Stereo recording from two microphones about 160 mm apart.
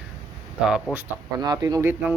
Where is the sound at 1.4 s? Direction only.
20° right (ahead or behind).